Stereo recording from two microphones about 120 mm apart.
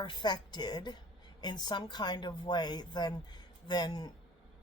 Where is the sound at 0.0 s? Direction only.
40° left (ahead or behind).